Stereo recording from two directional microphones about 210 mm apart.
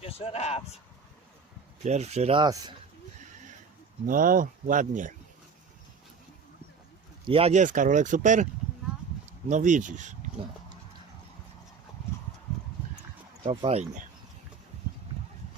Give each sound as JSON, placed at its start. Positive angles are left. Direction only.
{"t": 0.0, "sound": "speech", "side_deg": 30}
{"t": 1.8, "sound": "speech", "side_deg": -30}
{"t": 4.0, "sound": "speech", "side_deg": -40}
{"t": 7.3, "sound": "speech", "side_deg": -25}
{"t": 9.5, "sound": "speech", "side_deg": -35}
{"t": 13.4, "sound": "speech", "side_deg": -30}